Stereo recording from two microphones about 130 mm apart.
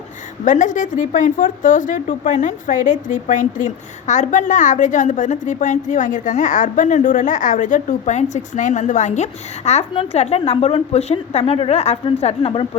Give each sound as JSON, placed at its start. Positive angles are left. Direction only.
{"t": 0.4, "sound": "a woman's voice", "side_deg": 75}